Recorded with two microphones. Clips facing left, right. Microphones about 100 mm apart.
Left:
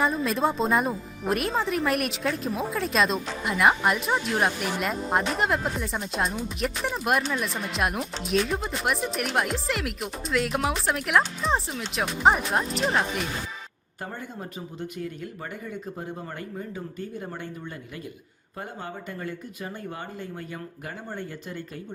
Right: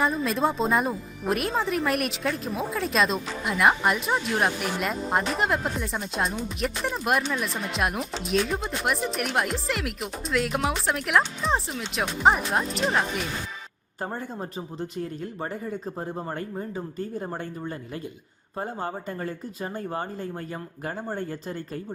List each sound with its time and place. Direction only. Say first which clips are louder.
0.0 s speech: even; centre (ahead or behind)
14.0 s speech: right 4 dB; 35° right (ahead or behind)
18.5 s speech: right 5 dB; 35° right (ahead or behind)